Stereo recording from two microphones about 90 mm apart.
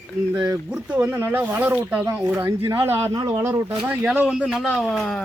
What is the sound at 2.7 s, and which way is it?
Speech, 30° right (ahead or behind).